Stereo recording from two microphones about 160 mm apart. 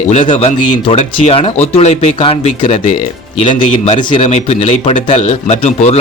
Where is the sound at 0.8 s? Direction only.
40° left (ahead or behind).